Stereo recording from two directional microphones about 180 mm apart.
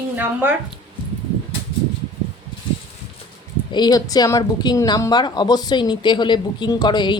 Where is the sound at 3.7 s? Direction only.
20° left (ahead or behind).